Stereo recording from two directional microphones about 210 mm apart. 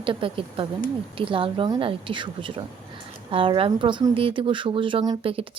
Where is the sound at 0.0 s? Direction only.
25° right (ahead or behind).